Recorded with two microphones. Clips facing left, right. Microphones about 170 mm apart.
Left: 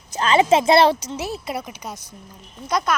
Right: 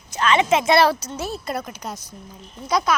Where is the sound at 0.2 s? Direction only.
30° left (ahead or behind).